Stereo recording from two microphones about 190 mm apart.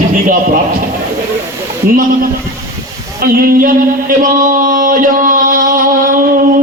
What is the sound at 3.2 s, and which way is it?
Mantra, 50° right (ahead or behind).